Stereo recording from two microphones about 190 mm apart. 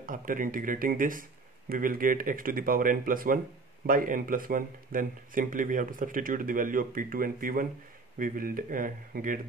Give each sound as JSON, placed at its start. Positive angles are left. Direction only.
{"t": 0.0, "sound": "speech", "side_deg": -45}